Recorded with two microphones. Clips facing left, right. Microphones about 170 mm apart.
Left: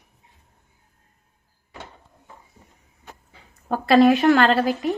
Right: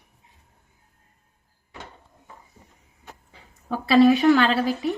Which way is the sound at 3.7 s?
50° left (ahead or behind).